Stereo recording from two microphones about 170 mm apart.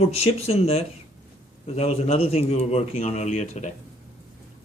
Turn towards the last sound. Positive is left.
turn(degrees=40)  # may be behind; listen again after turning